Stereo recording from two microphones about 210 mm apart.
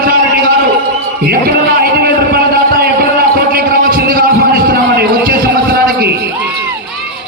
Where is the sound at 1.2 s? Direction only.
50° right (ahead or behind).